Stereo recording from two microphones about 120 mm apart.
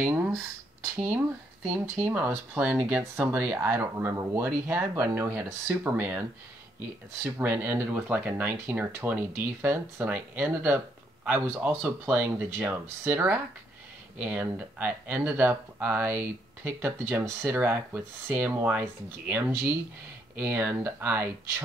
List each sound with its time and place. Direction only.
0.0 s speech: 15° right (ahead or behind)
3.0 s speech: 25° right (ahead or behind)
7.2 s speech: 20° right (ahead or behind)